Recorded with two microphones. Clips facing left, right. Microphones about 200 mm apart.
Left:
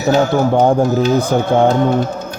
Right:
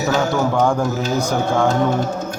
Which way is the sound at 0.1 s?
35° left (ahead or behind).